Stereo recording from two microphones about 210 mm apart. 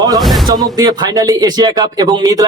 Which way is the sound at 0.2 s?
Centre (ahead or behind).